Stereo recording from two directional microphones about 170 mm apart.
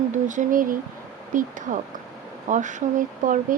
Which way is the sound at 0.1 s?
50° right (ahead or behind).